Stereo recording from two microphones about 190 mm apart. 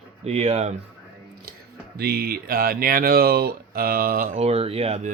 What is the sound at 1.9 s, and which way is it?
Speech, 55° right (ahead or behind).